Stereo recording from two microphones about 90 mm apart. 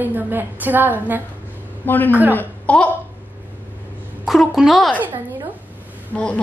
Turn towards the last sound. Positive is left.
turn(degrees=20)  # may be behind; listen again after turning